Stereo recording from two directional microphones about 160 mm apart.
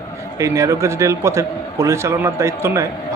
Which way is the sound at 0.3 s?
20° right (ahead or behind).